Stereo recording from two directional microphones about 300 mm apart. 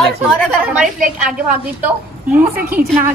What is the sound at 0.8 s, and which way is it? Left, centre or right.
Speech, right.